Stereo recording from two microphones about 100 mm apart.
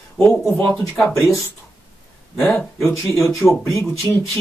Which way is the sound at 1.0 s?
30° left (ahead or behind).